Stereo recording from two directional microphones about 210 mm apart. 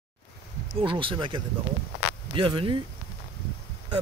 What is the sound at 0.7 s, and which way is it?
Speech, 25° right (ahead or behind).